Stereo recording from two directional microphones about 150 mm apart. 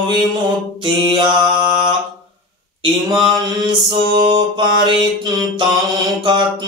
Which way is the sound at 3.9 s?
35° right (ahead or behind).